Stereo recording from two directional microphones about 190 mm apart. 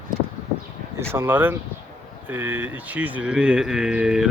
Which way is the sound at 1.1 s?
10° right (ahead or behind).